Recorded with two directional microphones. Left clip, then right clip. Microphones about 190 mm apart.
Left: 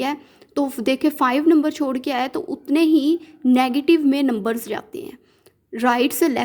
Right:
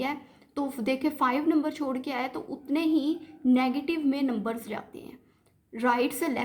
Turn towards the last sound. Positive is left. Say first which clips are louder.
# left 9 dB
turn(degrees=40)  # may be behind; listen again after turning